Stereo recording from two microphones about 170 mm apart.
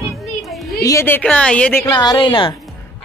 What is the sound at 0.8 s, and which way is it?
A man's voice, 15° left (ahead or behind).